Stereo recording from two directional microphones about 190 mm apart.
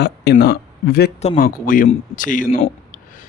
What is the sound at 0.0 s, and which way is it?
Speech, 60° left (ahead or behind).